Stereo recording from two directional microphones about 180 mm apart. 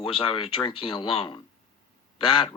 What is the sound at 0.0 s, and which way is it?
A man's voice, 30° left (ahead or behind).